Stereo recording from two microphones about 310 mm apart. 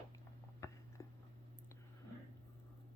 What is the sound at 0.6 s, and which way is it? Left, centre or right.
Chewing, centre.